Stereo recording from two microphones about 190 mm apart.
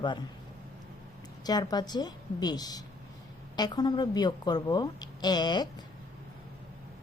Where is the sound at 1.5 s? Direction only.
20° left (ahead or behind).